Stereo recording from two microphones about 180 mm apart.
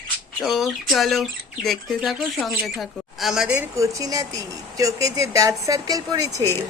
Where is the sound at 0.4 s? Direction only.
Centre (ahead or behind).